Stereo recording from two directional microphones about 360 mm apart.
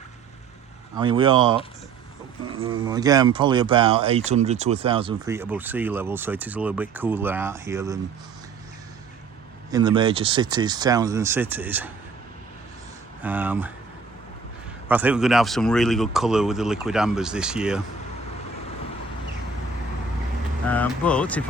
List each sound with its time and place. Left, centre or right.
0.9 s speech: centre
9.7 s speech: centre
13.2 s speech: centre
14.8 s speech: centre
20.7 s speech: centre